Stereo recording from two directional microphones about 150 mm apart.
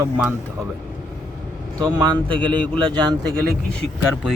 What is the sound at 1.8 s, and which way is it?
Speech, 25° right (ahead or behind).